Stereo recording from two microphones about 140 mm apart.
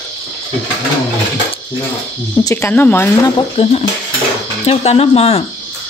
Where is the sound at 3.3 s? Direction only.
45° left (ahead or behind).